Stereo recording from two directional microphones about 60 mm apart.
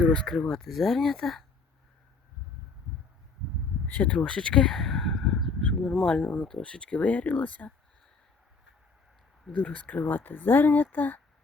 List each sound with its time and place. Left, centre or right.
0.0 s speech: centre
3.8 s a sound: left
6.0 s speech: centre
9.6 s speech: left
10.9 s female singing: left